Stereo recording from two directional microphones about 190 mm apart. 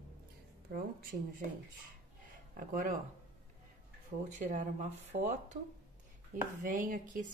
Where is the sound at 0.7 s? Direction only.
50° right (ahead or behind).